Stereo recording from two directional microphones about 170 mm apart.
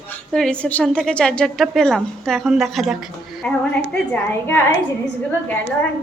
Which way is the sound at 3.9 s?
10° left (ahead or behind).